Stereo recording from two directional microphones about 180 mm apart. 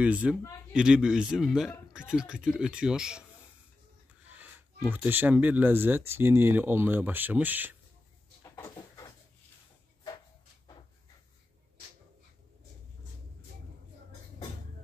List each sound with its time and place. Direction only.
0.0 s speech: 5° right (ahead or behind)
4.4 s speech: 10° right (ahead or behind)
8.4 s cupboard open or close: 15° left (ahead or behind)